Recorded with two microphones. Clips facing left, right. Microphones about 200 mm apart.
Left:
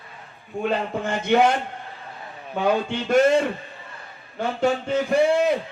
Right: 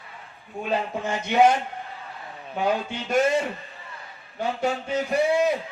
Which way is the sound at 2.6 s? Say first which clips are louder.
Left 3 dB; 55° left (ahead or behind).